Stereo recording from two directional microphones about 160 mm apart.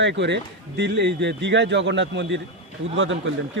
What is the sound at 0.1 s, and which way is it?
A man's voice, 90° right.